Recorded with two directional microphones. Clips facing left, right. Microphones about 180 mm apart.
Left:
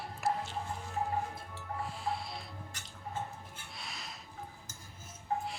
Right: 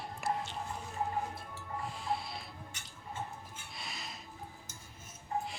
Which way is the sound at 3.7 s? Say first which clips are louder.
Right 2 dB; centre (ahead or behind).